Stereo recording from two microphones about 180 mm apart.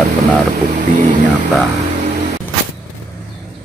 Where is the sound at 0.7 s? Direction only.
45° right (ahead or behind).